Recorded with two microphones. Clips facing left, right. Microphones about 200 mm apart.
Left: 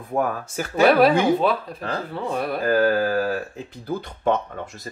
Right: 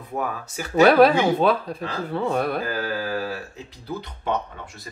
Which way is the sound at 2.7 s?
50° left (ahead or behind).